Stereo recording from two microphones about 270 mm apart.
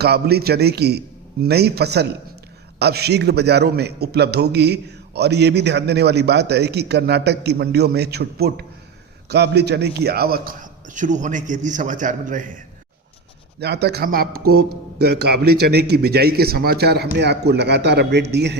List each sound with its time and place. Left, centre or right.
0.0 s a man's voice: right
13.6 s a man's voice: right
15.3 s speech: right
15.7 s a man's voice: right